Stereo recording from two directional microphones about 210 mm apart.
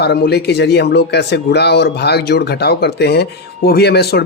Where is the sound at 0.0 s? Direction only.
50° left (ahead or behind).